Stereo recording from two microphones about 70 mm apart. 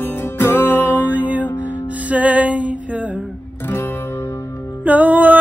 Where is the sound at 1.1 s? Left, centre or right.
Right.